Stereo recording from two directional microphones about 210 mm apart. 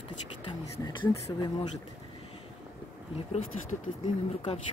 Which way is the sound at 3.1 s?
30° left (ahead or behind).